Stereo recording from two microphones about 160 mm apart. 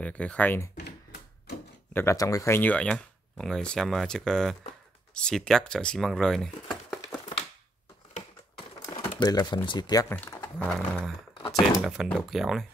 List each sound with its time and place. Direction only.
0.0 s speech: 10° left (ahead or behind)
0.7 s computer keyboard: 90° left
2.0 s speech: 20° left (ahead or behind); by 7.2 s centre (ahead or behind)
9.2 s speech: 25° left (ahead or behind)
10.0 s speech: 15° left (ahead or behind)